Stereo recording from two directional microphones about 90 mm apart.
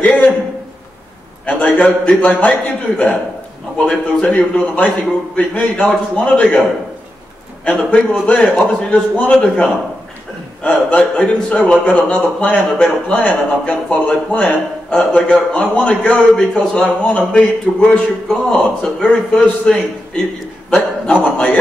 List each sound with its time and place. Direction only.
0.0 s a sound: 15° left (ahead or behind)
1.4 s a man's voice: 15° left (ahead or behind)
3.7 s a man's voice: 10° left (ahead or behind)
7.7 s a man's voice: 15° left (ahead or behind)